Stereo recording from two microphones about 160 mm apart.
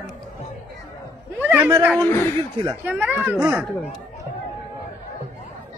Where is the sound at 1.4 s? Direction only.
10° right (ahead or behind).